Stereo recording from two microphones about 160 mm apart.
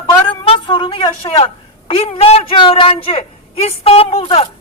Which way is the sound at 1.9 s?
40° left (ahead or behind).